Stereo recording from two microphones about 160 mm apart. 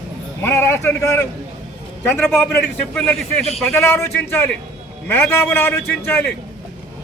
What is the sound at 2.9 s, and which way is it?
A man's voice, centre (ahead or behind).